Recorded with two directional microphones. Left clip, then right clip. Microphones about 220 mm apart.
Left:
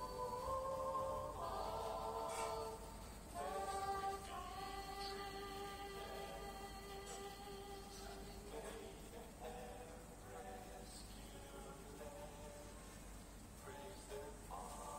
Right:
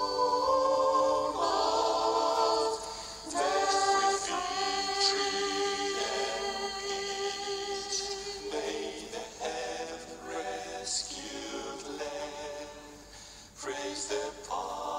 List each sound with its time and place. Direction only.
0.0 s a capella: 40° right (ahead or behind)
3.3 s choir: 40° right (ahead or behind)
8.5 s music: 40° right (ahead or behind)
13.7 s music: 40° right (ahead or behind)